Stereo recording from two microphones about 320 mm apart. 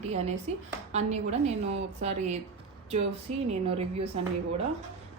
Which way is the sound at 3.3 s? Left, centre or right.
Right.